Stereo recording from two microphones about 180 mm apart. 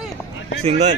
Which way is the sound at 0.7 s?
40° right (ahead or behind).